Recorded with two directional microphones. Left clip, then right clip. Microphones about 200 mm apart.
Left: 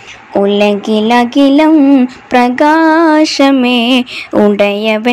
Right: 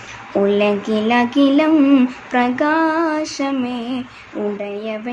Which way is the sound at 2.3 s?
30° left (ahead or behind).